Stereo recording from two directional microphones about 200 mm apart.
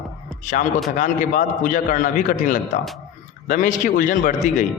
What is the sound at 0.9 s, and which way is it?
A man's voice, 40° left (ahead or behind).